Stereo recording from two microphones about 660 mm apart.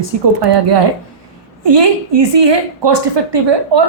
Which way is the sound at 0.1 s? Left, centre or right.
Right.